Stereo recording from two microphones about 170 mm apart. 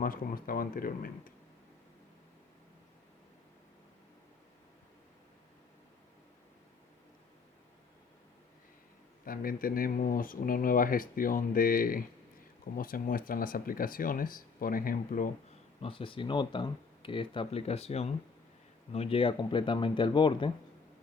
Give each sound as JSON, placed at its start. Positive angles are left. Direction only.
{"t": 0.0, "sound": "speech", "side_deg": 55}
{"t": 9.2, "sound": "speech", "side_deg": 55}
{"t": 15.8, "sound": "speech", "side_deg": 30}